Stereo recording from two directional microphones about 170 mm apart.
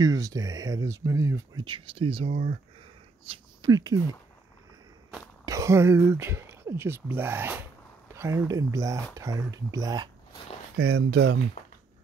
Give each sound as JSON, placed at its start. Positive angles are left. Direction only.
{"t": 0.0, "sound": "speech", "side_deg": -20}
{"t": 1.6, "sound": "speech", "side_deg": -30}
{"t": 3.3, "sound": "speech", "side_deg": -25}
{"t": 5.4, "sound": "speech", "side_deg": -20}
{"t": 11.0, "sound": "speech", "side_deg": -80}